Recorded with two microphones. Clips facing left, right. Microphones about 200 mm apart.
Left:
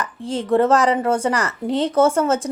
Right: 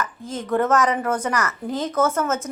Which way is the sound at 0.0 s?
30° left (ahead or behind).